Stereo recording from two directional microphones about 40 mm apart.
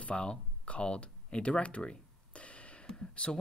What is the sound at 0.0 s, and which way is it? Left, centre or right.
Speech, left.